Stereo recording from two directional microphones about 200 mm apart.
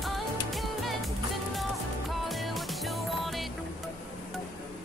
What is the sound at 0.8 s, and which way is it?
Music, centre (ahead or behind).